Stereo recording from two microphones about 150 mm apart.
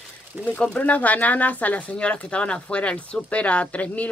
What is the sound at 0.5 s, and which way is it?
Speech, 10° left (ahead or behind).